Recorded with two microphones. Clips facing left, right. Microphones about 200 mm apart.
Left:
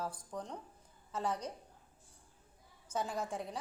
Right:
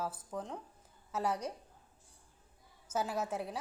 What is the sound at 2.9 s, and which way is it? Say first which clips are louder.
Speech: right 2 dB; 5° right (ahead or behind).